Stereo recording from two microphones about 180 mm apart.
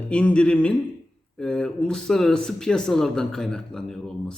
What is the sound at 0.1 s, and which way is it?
Speech, 5° left (ahead or behind).